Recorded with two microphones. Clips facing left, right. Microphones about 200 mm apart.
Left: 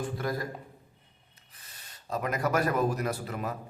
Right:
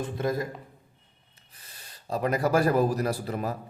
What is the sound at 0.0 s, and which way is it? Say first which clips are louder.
Speech: right 4 dB; 20° right (ahead or behind).